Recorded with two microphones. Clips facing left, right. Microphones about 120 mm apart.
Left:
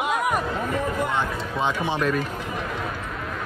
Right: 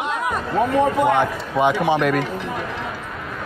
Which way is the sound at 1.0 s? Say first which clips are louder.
Right 8 dB; 60° right (ahead or behind).